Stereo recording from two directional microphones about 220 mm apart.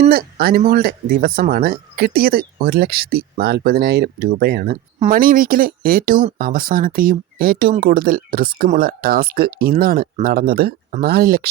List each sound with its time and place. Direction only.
0.1 s speech: 45° right (ahead or behind)